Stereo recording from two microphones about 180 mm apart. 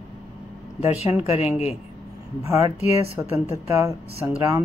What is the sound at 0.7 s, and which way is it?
Speech, 35° left (ahead or behind).